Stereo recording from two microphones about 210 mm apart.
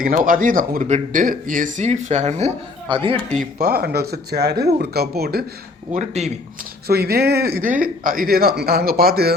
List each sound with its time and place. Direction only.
0.0 s speech: 40° right (ahead or behind)
2.9 s speech: 25° right (ahead or behind)
3.6 s speech: 45° right (ahead or behind)
5.9 s speech: 35° right (ahead or behind)
6.8 s speech: 50° right (ahead or behind)